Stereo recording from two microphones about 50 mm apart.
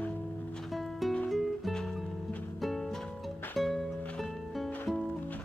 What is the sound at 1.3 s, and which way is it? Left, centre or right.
Music, centre.